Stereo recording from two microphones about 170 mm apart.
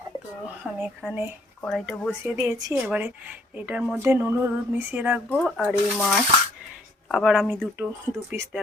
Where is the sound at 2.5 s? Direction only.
20° right (ahead or behind).